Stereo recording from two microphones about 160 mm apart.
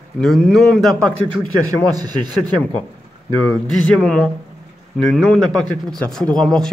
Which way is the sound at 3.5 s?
5° left (ahead or behind).